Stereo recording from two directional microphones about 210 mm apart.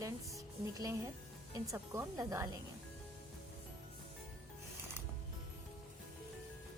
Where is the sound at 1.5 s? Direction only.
15° right (ahead or behind).